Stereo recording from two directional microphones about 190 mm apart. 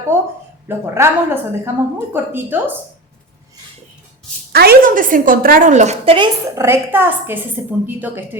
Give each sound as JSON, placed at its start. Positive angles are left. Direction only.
{"t": 0.1, "sound": "a woman's voice", "side_deg": -10}
{"t": 4.5, "sound": "a woman's voice", "side_deg": -55}
{"t": 6.6, "sound": "a woman's voice", "side_deg": -10}